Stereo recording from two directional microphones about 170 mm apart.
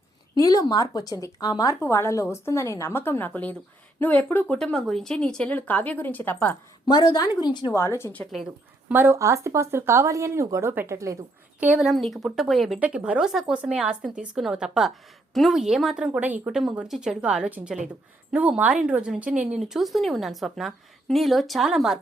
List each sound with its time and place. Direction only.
0.4 s speech: 20° left (ahead or behind)
6.8 s speech: 25° left (ahead or behind); by 8.5 s centre (ahead or behind)
8.9 s speech: 10° right (ahead or behind)
11.6 s speech: 5° right (ahead or behind)